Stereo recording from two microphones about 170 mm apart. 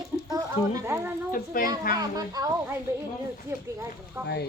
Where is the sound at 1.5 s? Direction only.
55° left (ahead or behind).